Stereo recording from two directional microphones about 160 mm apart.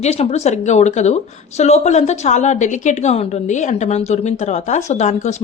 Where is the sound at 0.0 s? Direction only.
45° left (ahead or behind).